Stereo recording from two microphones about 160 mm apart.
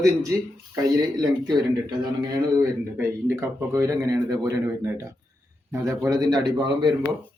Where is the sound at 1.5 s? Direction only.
25° right (ahead or behind).